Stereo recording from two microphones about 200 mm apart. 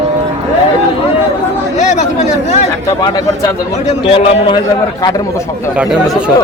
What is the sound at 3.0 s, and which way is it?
Speech, 20° left (ahead or behind).